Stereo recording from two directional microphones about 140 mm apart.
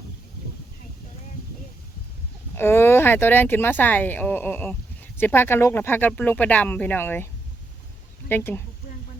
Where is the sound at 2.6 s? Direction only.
15° left (ahead or behind).